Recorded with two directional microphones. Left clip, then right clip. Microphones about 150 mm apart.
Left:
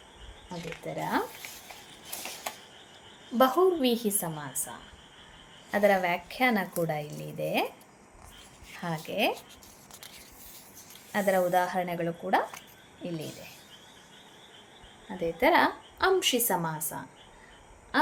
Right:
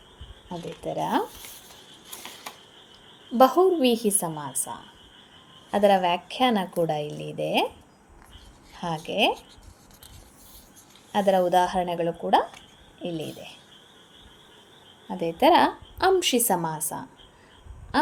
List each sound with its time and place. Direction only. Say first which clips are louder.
0.9 s a woman's voice: right 5 dB; 40° right (ahead or behind)
3.3 s a woman's voice: right 5 dB; 40° right (ahead or behind)
5.7 s a woman's voice: right 4 dB; 35° right (ahead or behind)
8.8 s speech: right 5 dB; 30° right (ahead or behind)
11.1 s a woman's voice: right 5 dB; 30° right (ahead or behind)
15.2 s a woman's voice: right 5 dB; 50° right (ahead or behind)
17.9 s a sound: right 3 dB; 35° right (ahead or behind)